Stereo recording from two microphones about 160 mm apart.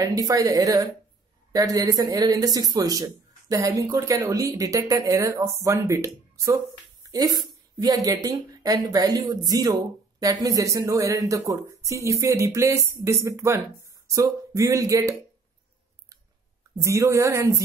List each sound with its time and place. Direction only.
0.0 s speech: 20° right (ahead or behind)
16.7 s speech: 20° right (ahead or behind)